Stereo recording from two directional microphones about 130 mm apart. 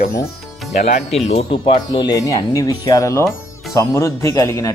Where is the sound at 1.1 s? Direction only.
55° left (ahead or behind).